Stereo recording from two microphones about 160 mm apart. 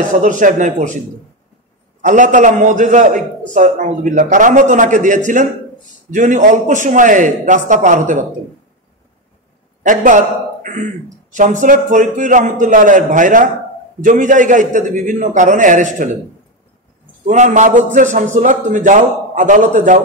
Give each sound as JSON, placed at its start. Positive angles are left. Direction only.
{"t": 0.1, "sound": "a man's voice", "side_deg": -50}
{"t": 2.0, "sound": "a man's voice", "side_deg": -50}
{"t": 9.8, "sound": "a man's voice", "side_deg": -55}
{"t": 17.3, "sound": "a man's voice", "side_deg": -50}